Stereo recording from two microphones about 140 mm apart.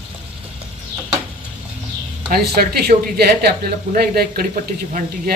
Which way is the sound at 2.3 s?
90° right.